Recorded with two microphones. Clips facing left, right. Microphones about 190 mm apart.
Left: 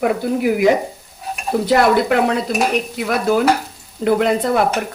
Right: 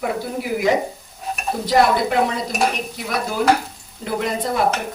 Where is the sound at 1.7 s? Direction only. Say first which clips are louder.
Left 2 dB; 65° left (ahead or behind).